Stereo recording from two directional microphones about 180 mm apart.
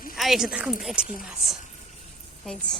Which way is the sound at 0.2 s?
Centre (ahead or behind).